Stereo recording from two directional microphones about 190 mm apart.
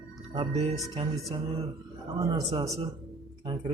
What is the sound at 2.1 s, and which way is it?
Speech, 20° right (ahead or behind).